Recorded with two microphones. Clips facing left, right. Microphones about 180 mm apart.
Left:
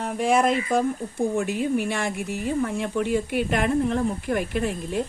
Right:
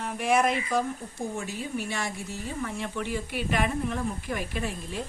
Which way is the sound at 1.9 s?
55° left (ahead or behind).